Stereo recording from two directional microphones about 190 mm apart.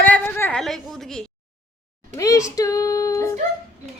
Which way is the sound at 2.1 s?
15° left (ahead or behind).